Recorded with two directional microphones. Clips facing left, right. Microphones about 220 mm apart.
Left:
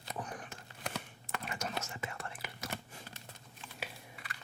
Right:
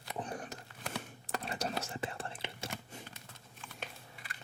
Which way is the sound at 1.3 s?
35° right (ahead or behind).